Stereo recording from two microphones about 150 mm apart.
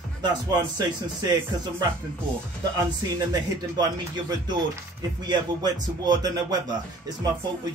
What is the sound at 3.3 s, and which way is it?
Speech, 25° right (ahead or behind).